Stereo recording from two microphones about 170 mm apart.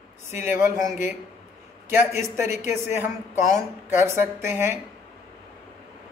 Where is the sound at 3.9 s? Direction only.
15° right (ahead or behind).